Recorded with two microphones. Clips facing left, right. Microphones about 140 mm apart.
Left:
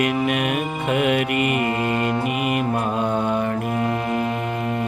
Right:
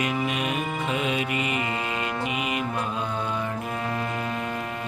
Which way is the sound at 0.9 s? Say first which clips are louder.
Left 9 dB; 60° left (ahead or behind).